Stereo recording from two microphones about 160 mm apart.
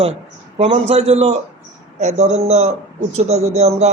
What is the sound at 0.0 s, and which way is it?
A man's voice, 40° right (ahead or behind).